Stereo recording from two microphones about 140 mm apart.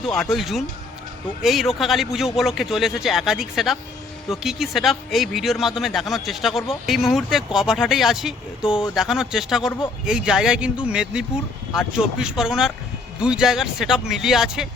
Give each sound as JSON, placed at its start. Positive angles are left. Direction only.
{"t": 0.0, "sound": "speech", "side_deg": 0}